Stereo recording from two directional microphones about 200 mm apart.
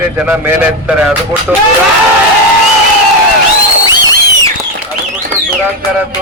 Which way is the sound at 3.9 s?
20° left (ahead or behind).